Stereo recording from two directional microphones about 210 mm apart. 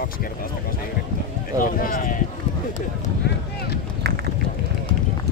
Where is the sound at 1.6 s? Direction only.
40° left (ahead or behind).